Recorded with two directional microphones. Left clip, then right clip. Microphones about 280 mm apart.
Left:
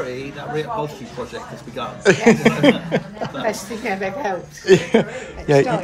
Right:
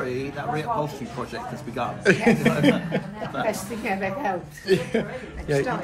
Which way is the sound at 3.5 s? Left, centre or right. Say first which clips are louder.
Left 3 dB; left.